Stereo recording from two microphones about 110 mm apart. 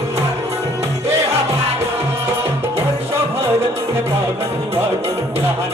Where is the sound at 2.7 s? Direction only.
25° right (ahead or behind).